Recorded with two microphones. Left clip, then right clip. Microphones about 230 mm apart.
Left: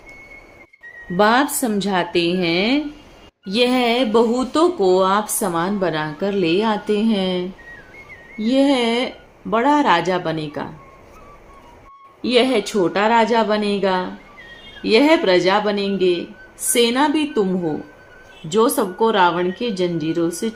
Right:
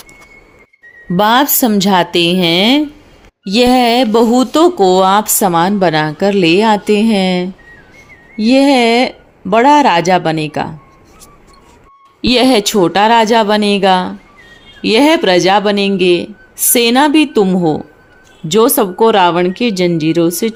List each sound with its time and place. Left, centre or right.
1.1 s speech: right
12.2 s speech: right